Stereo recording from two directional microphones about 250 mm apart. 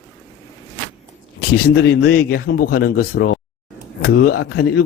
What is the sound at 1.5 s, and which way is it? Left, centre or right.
Speech, left.